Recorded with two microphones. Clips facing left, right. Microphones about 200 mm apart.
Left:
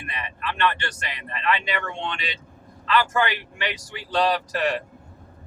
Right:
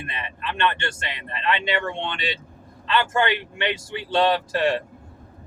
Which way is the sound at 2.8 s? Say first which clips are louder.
Even; 25° right (ahead or behind).